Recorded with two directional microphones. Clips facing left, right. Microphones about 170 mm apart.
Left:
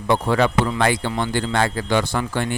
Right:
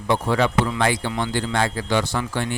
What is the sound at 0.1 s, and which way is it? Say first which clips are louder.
Speech: left 2 dB; 50° left (ahead or behind).